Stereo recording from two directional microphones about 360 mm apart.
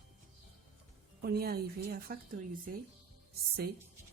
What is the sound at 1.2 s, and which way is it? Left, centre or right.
Speech, right.